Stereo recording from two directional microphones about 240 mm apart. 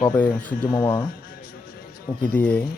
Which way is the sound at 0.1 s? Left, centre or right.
Centre.